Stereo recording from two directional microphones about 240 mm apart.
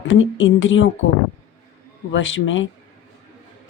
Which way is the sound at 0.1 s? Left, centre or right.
Left.